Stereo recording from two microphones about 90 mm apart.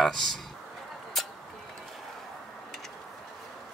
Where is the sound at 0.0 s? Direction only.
Centre (ahead or behind).